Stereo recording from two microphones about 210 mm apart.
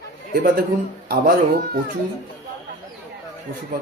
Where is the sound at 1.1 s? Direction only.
45° right (ahead or behind).